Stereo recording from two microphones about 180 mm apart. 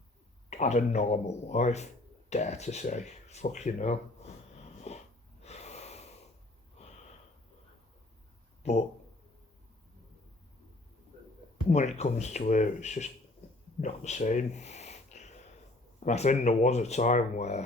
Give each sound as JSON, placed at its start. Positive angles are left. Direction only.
{"t": 0.5, "sound": "speech", "side_deg": 40}
{"t": 4.9, "sound": "snort", "side_deg": 35}
{"t": 5.4, "sound": "gasp", "side_deg": 35}
{"t": 8.6, "sound": "a sound", "side_deg": 35}
{"t": 11.7, "sound": "speech", "side_deg": 40}
{"t": 13.8, "sound": "a sound", "side_deg": 40}
{"t": 16.0, "sound": "speech", "side_deg": 40}